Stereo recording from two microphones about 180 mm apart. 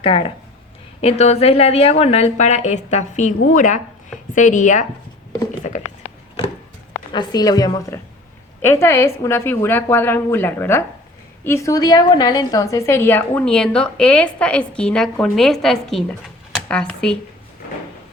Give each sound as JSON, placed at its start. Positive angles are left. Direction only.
{"t": 0.0, "sound": "a woman's voice", "side_deg": 30}
{"t": 7.1, "sound": "a woman's voice", "side_deg": 25}